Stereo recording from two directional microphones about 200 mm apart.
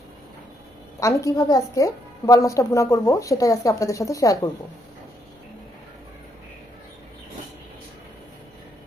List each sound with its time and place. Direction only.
0.9 s a woman's voice: 15° left (ahead or behind)